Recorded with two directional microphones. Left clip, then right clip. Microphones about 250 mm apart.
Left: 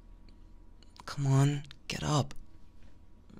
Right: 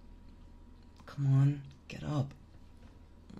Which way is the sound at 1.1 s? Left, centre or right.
Left.